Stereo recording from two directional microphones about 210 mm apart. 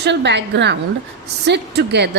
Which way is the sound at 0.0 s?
55° right (ahead or behind).